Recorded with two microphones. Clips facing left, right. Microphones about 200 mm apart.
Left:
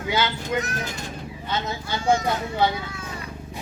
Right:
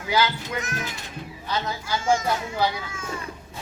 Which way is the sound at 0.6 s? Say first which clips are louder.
Left 2 dB; 35° left (ahead or behind).